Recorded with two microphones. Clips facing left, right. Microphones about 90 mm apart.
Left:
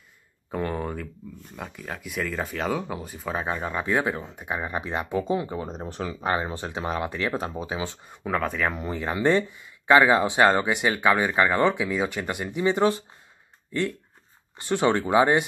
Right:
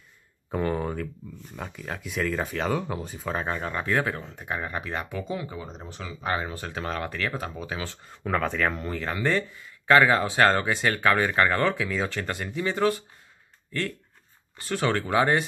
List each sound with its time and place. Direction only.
0.5 s speech: centre (ahead or behind); by 5.0 s 20° left (ahead or behind)
5.1 s speech: 30° left (ahead or behind)
5.6 s speech: 40° left (ahead or behind)
6.2 s speech: 25° left (ahead or behind)
7.3 s speech: 25° left (ahead or behind)
8.3 s speech: 5° left (ahead or behind); by 13.0 s 25° left (ahead or behind)
14.6 s speech: 20° left (ahead or behind)